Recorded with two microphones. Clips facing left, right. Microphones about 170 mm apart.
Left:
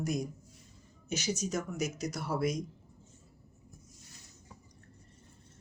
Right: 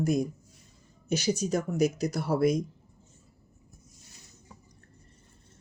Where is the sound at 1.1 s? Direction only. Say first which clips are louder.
Right 7 dB; 35° right (ahead or behind).